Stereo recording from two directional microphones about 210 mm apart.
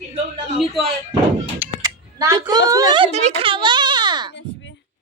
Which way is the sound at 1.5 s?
15° right (ahead or behind).